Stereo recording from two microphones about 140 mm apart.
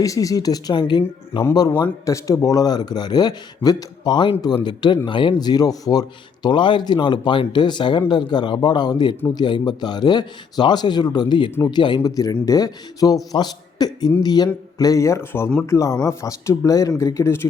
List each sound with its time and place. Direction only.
0.0 s speech: 25° left (ahead or behind)
1.8 s a man's voice: 25° left (ahead or behind)